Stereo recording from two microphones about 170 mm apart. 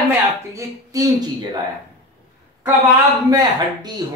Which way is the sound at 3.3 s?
25° right (ahead or behind).